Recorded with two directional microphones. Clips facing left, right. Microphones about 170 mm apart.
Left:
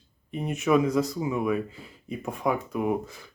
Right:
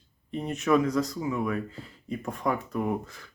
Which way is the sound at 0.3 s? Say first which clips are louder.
Left 1 dB; 10° left (ahead or behind).